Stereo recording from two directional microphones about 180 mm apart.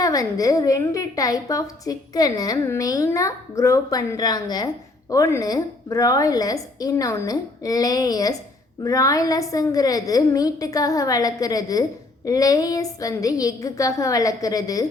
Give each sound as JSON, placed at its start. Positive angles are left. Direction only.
{"t": 0.0, "sound": "a woman's voice", "side_deg": 20}